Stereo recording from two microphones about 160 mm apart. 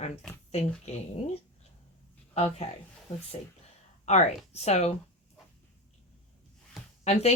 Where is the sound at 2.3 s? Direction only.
45° left (ahead or behind).